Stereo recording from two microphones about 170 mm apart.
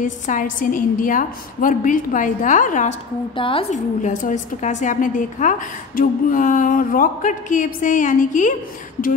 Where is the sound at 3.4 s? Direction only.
30° left (ahead or behind).